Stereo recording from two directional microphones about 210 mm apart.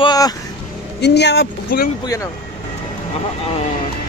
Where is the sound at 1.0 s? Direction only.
55° left (ahead or behind).